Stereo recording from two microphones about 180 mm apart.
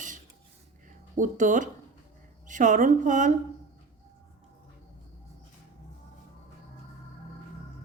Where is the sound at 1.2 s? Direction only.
45° right (ahead or behind).